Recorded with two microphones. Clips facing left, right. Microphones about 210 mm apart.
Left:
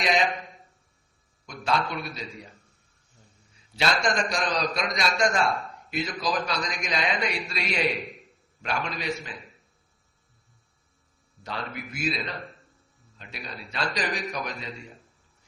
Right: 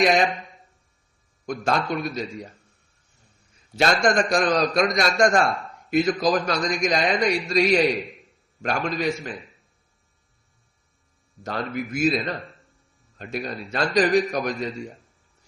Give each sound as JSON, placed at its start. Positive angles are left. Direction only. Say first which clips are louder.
{"t": 0.0, "sound": "a man's voice", "louder": "right 6 dB", "side_deg": -50}
{"t": 1.5, "sound": "a man's voice", "louder": "right 4 dB", "side_deg": -45}
{"t": 3.8, "sound": "a man's voice", "louder": "right 6 dB", "side_deg": -45}
{"t": 11.4, "sound": "a man's voice", "louder": "right 7 dB", "side_deg": -45}